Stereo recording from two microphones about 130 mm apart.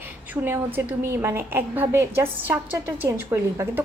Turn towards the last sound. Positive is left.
turn(degrees=-20)  # may be behind; listen again after turning